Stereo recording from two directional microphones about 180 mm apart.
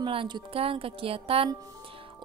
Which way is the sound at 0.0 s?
25° right (ahead or behind).